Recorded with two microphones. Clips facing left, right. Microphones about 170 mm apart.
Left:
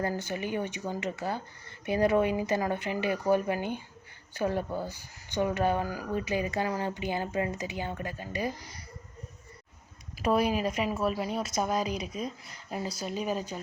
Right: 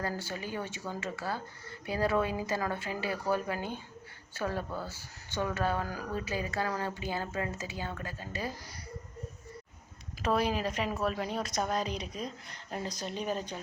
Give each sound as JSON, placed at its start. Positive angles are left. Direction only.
{"t": 0.0, "sound": "speech", "side_deg": 20}
{"t": 10.2, "sound": "speech", "side_deg": 10}